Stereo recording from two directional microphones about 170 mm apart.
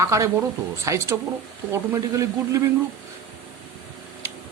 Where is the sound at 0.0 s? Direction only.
15° right (ahead or behind).